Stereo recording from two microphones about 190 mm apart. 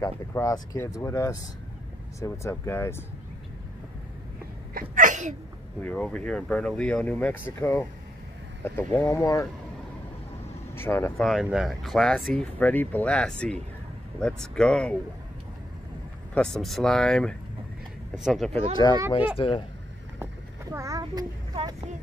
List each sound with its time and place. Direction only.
0.0 s speech: 20° left (ahead or behind)
4.7 s sneeze: 45° right (ahead or behind)
5.8 s speech: 5° left (ahead or behind)
8.6 s speech: 10° left (ahead or behind)
10.7 s speech: 10° left (ahead or behind)
11.2 s speech: centre (ahead or behind)
16.3 s speech: centre (ahead or behind)
18.8 s speech: 20° left (ahead or behind)
20.7 s child singing: 15° right (ahead or behind)